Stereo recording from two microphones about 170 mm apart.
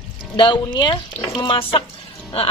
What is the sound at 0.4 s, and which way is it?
Speech, 25° left (ahead or behind).